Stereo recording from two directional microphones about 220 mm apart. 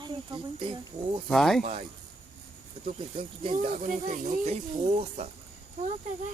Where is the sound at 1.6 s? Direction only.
35° right (ahead or behind).